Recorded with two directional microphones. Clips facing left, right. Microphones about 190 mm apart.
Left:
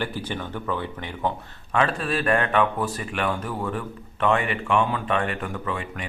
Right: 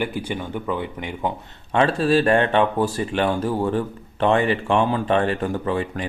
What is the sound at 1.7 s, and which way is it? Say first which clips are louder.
Speech: right 6 dB; 30° right (ahead or behind).